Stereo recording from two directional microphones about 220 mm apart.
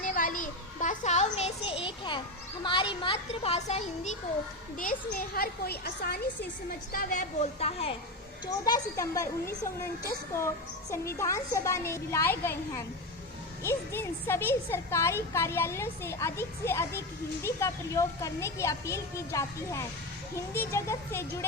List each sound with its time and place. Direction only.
0.0 s child singing: 40° left (ahead or behind); by 2.2 s 25° left (ahead or behind)
2.6 s a child's voice: 20° left (ahead or behind)
4.8 s a woman's voice: 40° left (ahead or behind)
6.9 s a woman's voice: 35° left (ahead or behind)
8.6 s speech: 15° left (ahead or behind)
10.9 s speech: 15° left (ahead or behind)